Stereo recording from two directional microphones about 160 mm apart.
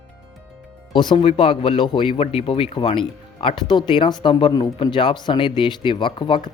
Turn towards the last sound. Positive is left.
turn(degrees=30)  # may be behind; listen again after turning